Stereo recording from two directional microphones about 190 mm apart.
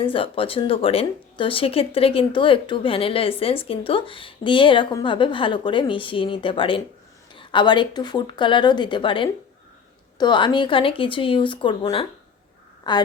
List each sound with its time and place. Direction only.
0.0 s speech: 30° left (ahead or behind)